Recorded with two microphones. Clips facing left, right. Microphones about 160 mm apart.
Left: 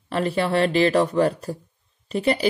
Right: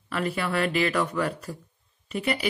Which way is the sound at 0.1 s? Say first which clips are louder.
Left 6 dB; 30° left (ahead or behind).